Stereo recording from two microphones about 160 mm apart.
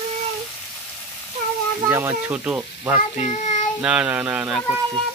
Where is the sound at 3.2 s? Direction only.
45° left (ahead or behind).